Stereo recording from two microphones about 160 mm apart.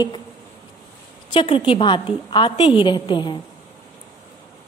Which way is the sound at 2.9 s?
30° left (ahead or behind).